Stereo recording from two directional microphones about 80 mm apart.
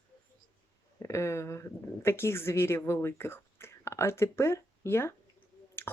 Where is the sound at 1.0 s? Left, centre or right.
Left.